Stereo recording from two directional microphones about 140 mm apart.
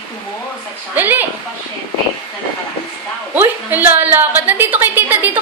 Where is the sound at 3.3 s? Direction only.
15° right (ahead or behind).